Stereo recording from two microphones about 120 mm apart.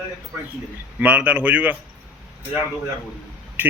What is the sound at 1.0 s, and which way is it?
Speech, 10° right (ahead or behind).